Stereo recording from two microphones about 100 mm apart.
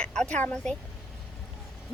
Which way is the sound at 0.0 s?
10° left (ahead or behind).